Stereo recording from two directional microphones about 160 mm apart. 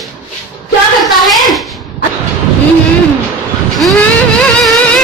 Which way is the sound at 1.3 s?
Centre (ahead or behind).